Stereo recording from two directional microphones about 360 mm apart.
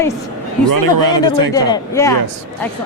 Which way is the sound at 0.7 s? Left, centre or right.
Right.